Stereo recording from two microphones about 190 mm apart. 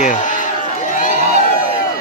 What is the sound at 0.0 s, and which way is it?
Run, 45° left (ahead or behind).